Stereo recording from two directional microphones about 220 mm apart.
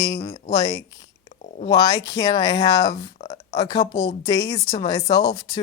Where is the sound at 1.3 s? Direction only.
30° left (ahead or behind).